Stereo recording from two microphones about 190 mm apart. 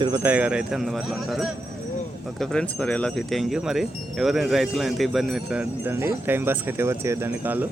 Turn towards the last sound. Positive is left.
turn(degrees=-10)  # may be behind; listen again after turning